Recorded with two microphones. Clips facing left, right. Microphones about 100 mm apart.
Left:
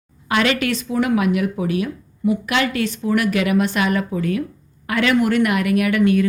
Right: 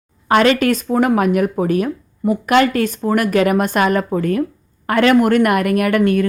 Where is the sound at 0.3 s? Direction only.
40° right (ahead or behind).